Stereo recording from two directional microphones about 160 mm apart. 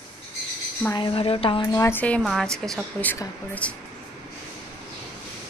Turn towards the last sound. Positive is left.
turn(degrees=10)  # may be behind; listen again after turning